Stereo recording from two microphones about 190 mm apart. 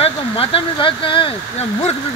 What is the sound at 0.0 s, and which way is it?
Speech, 30° left (ahead or behind).